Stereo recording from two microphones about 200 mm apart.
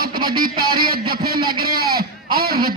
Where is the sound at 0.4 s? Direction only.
50° right (ahead or behind).